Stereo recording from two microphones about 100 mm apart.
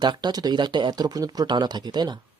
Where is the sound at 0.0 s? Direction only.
45° right (ahead or behind).